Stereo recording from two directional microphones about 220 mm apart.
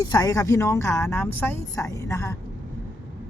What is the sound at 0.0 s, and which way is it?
Speech, 15° left (ahead or behind).